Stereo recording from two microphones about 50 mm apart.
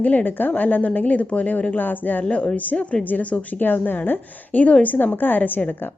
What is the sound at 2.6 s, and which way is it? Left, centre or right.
A woman's voice, left.